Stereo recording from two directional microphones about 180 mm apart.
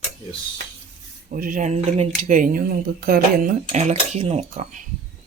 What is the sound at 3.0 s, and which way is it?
Cutlery, 50° right (ahead or behind).